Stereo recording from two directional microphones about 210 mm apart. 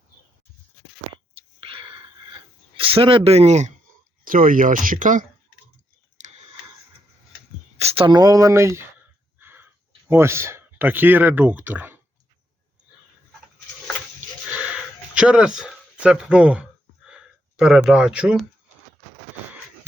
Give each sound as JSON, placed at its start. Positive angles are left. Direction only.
{"t": 1.6, "sound": "wheeze", "side_deg": -25}
{"t": 2.7, "sound": "speech", "side_deg": -25}
{"t": 7.8, "sound": "speech", "side_deg": -30}
{"t": 9.4, "sound": "a sound", "side_deg": -10}
{"t": 10.1, "sound": "speech", "side_deg": -10}
{"t": 15.2, "sound": "speech", "side_deg": -5}